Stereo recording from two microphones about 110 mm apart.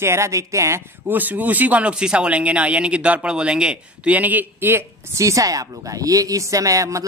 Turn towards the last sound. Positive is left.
turn(degrees=-30)  # may be behind; listen again after turning